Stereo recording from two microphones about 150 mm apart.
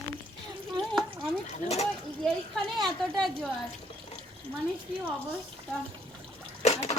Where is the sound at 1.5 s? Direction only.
45° left (ahead or behind).